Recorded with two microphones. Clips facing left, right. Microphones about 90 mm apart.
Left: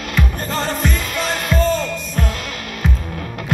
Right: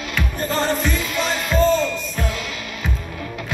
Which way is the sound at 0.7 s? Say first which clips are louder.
Even; 50° left (ahead or behind).